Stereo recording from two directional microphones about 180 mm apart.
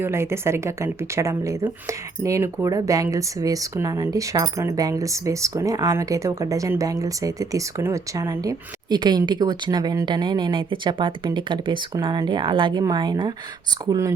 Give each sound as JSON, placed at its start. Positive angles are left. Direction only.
{"t": 0.0, "sound": "a woman's voice", "side_deg": -15}